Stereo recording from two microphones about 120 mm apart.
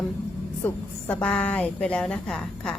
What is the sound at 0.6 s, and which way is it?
A woman's voice, 15° left (ahead or behind).